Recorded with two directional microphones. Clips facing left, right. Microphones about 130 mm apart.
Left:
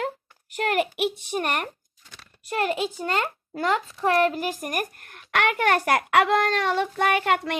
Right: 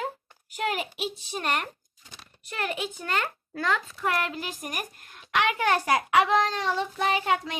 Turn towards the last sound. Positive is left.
turn(degrees=65)  # may be behind; listen again after turning